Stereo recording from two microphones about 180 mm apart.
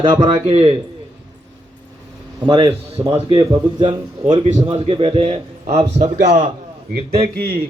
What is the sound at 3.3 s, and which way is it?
A man's voice, 25° right (ahead or behind).